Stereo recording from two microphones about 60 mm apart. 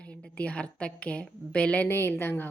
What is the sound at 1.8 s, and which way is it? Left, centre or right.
Speech, left.